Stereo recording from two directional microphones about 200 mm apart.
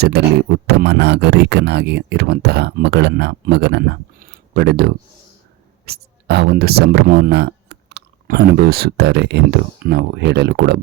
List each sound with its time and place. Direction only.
0.1 s speech: 55° right (ahead or behind)